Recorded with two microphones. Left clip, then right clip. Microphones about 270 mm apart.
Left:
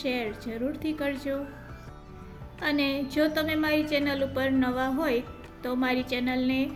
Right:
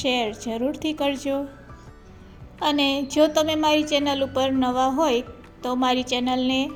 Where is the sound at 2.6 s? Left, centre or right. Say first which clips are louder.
Right 6 dB; centre.